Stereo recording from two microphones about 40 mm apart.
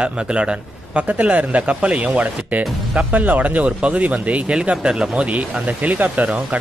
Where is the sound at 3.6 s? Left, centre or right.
Right.